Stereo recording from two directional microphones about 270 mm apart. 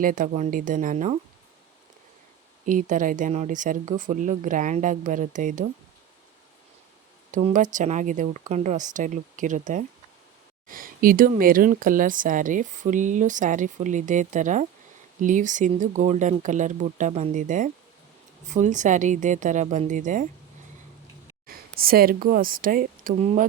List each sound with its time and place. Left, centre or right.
0.0 s speech: right
2.6 s speech: right
7.3 s speech: right
21.4 s speech: right